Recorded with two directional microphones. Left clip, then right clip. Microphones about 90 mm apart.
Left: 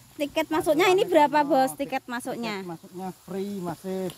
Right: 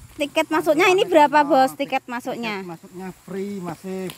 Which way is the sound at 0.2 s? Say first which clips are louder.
Right 5 dB; 10° right (ahead or behind).